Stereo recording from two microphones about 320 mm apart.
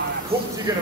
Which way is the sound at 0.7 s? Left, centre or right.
Centre.